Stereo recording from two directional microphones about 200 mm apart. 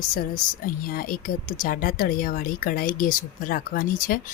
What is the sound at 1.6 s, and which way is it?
Speech, 45° left (ahead or behind).